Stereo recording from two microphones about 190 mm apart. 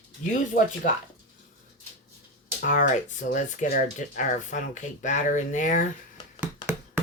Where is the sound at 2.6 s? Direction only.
45° left (ahead or behind).